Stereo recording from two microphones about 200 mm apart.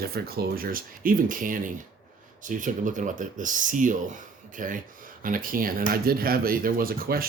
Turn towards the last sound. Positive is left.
turn(degrees=-45)  # may be behind; listen again after turning